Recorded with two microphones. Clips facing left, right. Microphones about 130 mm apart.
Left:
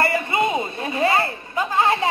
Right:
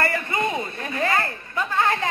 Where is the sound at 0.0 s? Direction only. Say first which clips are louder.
Left 4 dB; 15° left (ahead or behind).